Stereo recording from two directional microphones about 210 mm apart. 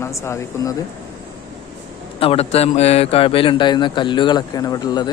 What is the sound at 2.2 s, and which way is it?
Speech, 30° left (ahead or behind).